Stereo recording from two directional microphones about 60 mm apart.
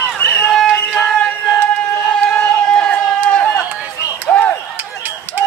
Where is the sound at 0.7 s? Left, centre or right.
Left.